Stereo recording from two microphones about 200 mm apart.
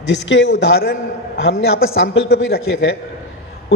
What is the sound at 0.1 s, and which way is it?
Speech, 65° left (ahead or behind).